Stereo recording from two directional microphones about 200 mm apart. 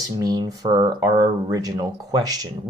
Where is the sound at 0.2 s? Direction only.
20° right (ahead or behind).